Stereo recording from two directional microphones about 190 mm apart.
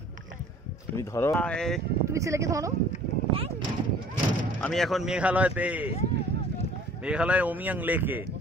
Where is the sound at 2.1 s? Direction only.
15° right (ahead or behind).